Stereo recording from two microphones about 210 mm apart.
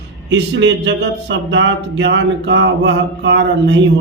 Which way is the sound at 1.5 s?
60° right (ahead or behind).